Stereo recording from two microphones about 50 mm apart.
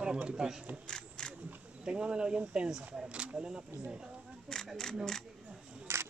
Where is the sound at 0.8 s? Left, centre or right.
Centre.